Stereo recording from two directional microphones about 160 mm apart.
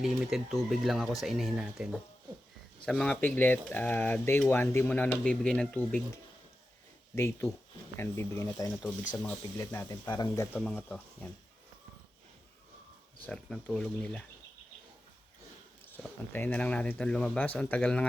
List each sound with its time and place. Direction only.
0.0 s speech: centre (ahead or behind)
7.2 s speech: 15° left (ahead or behind)
10.6 s speech: 5° left (ahead or behind)
13.2 s speech: 5° left (ahead or behind)
16.3 s speech: 10° left (ahead or behind)